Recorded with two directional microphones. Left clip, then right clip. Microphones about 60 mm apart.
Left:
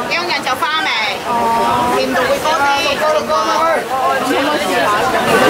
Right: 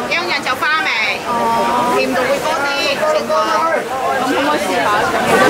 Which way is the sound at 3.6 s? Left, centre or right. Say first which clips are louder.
Left 2 dB; left.